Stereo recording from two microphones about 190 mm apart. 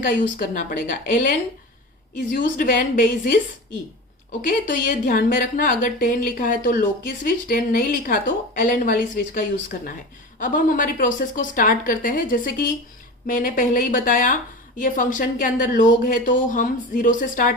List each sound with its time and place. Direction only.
0.0 s speech: 45° left (ahead or behind)
4.4 s speech: 45° left (ahead or behind)